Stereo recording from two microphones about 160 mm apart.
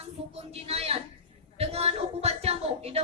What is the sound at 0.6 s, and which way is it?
Speech, 40° right (ahead or behind).